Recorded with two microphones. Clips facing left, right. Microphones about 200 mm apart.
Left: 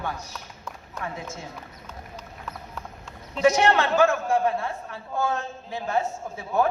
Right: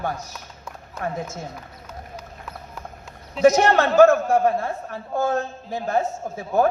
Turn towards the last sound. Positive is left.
turn(degrees=-40)  # may be behind; listen again after turning